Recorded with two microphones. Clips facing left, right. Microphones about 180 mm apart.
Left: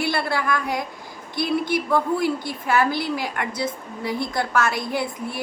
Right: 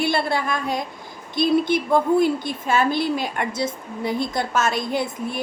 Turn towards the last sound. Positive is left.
turn(degrees=-25)  # may be behind; listen again after turning